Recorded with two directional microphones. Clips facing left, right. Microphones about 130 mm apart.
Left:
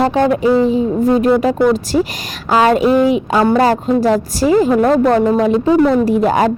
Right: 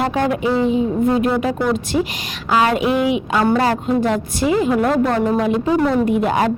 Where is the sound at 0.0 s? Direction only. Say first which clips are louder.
Left 5 dB; 30° left (ahead or behind).